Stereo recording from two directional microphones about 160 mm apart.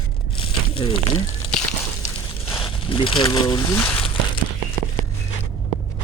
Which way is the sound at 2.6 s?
35° left (ahead or behind).